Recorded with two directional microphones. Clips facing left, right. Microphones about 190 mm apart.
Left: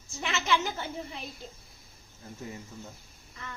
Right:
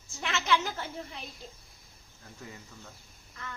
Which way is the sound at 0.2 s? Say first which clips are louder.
Even; 5° left (ahead or behind).